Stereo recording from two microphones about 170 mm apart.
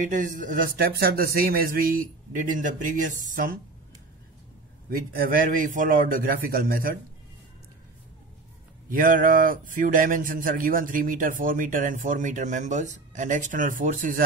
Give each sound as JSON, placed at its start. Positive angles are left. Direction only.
{"t": 0.1, "sound": "speech", "side_deg": -50}
{"t": 4.8, "sound": "a man's voice", "side_deg": -60}
{"t": 8.8, "sound": "speech", "side_deg": -55}